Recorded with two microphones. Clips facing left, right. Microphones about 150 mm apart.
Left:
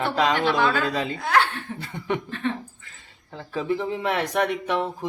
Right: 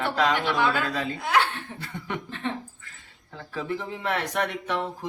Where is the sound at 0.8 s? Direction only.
25° left (ahead or behind).